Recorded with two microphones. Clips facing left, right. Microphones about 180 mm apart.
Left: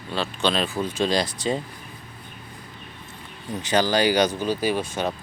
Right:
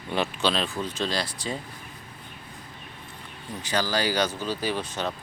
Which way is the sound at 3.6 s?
20° left (ahead or behind).